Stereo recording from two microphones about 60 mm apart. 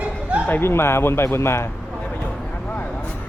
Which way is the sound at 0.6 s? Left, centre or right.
Left.